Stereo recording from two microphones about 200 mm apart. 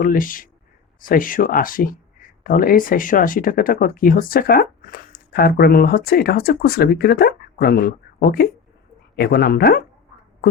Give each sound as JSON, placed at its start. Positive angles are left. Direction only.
{"t": 0.0, "sound": "speech", "side_deg": 45}